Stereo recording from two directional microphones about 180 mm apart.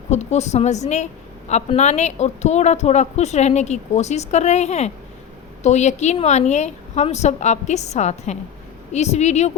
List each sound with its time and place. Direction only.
0.1 s a woman's voice: 40° left (ahead or behind)